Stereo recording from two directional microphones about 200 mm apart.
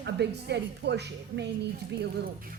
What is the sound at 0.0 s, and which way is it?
Speech, 55° right (ahead or behind).